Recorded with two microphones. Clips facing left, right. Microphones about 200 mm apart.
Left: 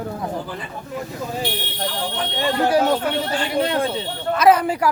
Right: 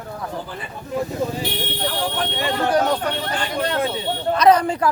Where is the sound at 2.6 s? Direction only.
10° left (ahead or behind).